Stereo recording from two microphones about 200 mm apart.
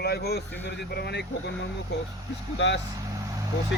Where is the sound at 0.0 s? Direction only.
55° left (ahead or behind).